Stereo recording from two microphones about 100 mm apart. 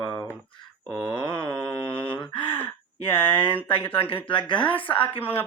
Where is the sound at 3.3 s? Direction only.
60° left (ahead or behind).